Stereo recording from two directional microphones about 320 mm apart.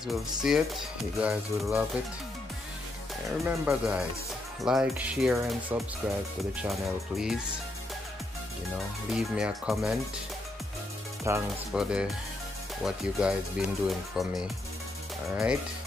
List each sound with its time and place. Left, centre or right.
0.0 s speech: centre
3.4 s speech: centre
8.7 s speech: centre
11.2 s speech: centre